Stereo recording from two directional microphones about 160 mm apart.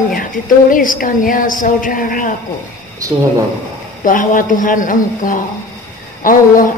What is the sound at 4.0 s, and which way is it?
A woman's voice, 55° left (ahead or behind).